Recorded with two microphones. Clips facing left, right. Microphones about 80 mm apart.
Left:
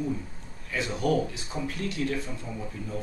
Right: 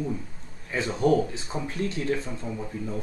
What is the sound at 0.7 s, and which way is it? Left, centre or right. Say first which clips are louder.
Speech: right 4 dB; right.